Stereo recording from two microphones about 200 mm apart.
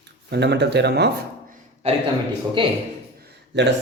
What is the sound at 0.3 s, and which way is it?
Speech, 55° right (ahead or behind).